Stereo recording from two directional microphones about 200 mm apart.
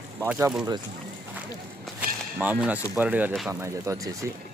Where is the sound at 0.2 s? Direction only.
10° right (ahead or behind).